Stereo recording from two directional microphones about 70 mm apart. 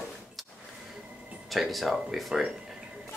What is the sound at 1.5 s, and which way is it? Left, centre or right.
Speech, centre.